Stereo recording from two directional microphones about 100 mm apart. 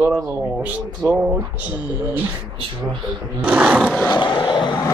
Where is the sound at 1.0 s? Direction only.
15° right (ahead or behind).